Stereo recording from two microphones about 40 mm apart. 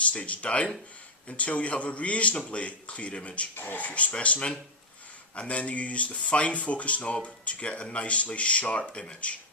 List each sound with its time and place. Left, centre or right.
0.1 s speech: left
3.6 s speech: left